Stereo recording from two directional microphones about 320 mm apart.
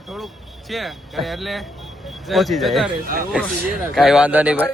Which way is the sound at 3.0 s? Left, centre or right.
Right.